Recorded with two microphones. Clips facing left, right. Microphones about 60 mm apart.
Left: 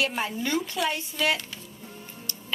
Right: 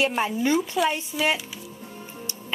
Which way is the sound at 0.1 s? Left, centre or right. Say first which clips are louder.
Right 5 dB; centre.